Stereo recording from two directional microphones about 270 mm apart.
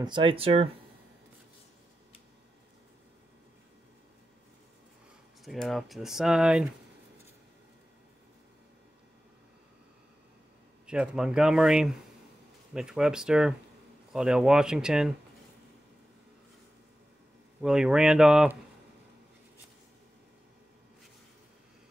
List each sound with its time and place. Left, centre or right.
0.0 s speech: centre
5.4 s speech: centre
10.9 s speech: centre
17.6 s speech: centre